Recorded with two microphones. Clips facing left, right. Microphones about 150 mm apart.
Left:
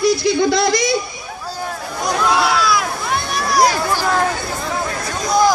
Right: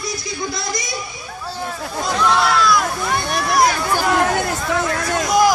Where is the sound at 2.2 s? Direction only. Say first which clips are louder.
Right 1 dB; 5° left (ahead or behind).